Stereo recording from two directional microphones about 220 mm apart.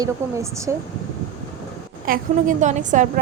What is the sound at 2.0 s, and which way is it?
A woman's voice, 40° right (ahead or behind).